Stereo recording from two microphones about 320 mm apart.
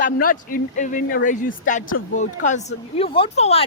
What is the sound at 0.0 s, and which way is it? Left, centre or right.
A woman's voice, left.